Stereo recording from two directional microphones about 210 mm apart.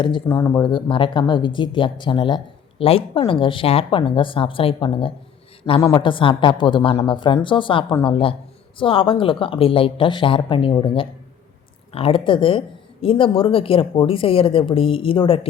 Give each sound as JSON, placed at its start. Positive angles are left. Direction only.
{"t": 0.3, "sound": "speech", "side_deg": 10}